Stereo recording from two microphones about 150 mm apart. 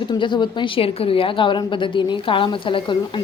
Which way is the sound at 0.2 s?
30° left (ahead or behind).